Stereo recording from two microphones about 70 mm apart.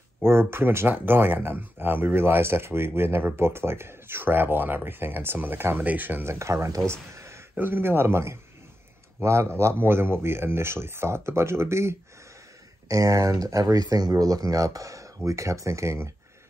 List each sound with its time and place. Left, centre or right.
0.2 s speech: right
6.2 s speech: right
7.2 s a sound: right
7.5 s speech: right
12.8 s speech: right